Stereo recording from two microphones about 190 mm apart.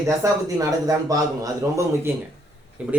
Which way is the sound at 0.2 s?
20° right (ahead or behind).